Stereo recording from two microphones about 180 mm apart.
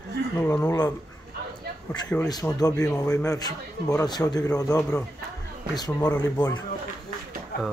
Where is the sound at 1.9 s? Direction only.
5° left (ahead or behind).